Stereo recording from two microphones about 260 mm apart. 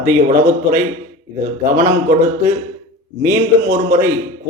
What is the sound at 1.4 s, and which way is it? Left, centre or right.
Speech, right.